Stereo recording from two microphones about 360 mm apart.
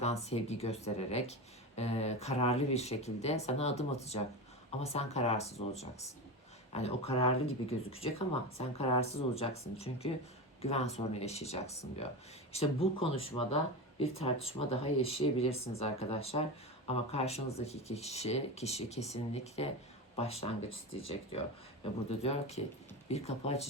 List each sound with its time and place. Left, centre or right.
0.0 s speech: centre